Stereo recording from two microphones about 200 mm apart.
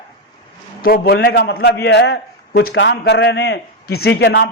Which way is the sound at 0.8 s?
50° left (ahead or behind).